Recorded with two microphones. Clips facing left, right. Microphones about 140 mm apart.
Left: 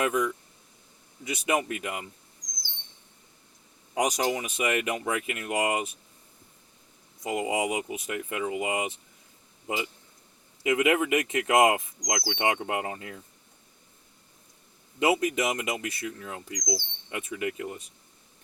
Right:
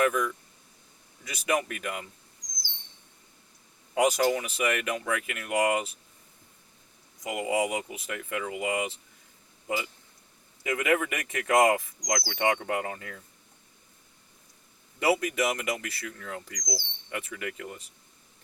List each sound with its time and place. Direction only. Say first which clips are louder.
0.0 s bird: right 1 dB; 20° left (ahead or behind)
3.9 s bird: right 3 dB; 15° left (ahead or behind)
7.3 s bird: even; 25° left (ahead or behind)
10.6 s bird: left 3 dB; 20° left (ahead or behind)
14.9 s bird: left 1 dB; 20° left (ahead or behind)